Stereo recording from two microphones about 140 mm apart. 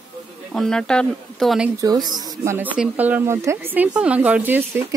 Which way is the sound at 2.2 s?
25° right (ahead or behind).